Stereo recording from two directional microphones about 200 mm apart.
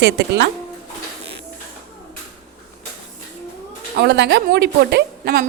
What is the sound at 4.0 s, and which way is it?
A woman's voice, 60° right (ahead or behind).